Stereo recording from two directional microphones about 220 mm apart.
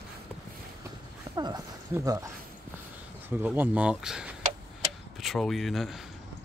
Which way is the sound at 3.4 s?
10° right (ahead or behind).